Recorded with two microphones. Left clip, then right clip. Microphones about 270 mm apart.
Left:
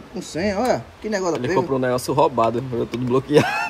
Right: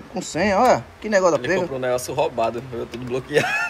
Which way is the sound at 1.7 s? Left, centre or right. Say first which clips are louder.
Left 2 dB; left.